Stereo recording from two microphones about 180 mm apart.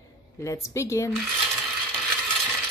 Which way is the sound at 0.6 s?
15° left (ahead or behind).